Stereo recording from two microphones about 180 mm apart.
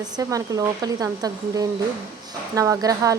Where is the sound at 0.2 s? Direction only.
20° right (ahead or behind).